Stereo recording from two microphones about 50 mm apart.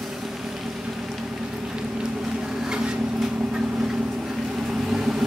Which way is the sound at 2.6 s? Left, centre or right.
Centre.